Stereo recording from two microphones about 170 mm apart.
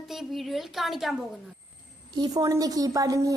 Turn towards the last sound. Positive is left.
turn(degrees=-20)  # may be behind; listen again after turning